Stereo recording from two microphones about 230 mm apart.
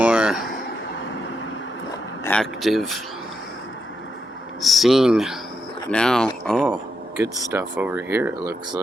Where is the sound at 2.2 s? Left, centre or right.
Centre.